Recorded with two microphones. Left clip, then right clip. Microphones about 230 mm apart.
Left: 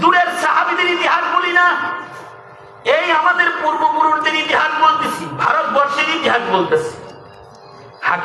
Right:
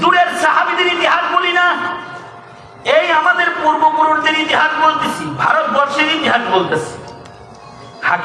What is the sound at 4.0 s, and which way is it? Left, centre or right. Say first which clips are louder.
Music: right 2 dB; left.